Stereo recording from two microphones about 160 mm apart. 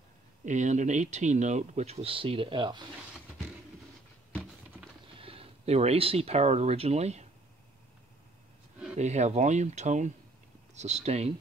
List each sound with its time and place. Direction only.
0.5 s speech: 50° right (ahead or behind); by 2.8 s 30° right (ahead or behind)
5.1 s speech: 35° right (ahead or behind)
8.9 s speech: 45° right (ahead or behind)